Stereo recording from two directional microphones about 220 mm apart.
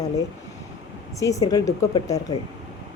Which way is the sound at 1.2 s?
15° left (ahead or behind).